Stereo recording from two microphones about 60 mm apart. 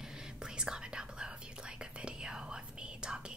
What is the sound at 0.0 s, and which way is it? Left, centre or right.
Whispering, centre.